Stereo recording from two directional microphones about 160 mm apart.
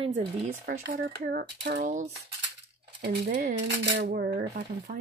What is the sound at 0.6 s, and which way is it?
Speech, 85° right.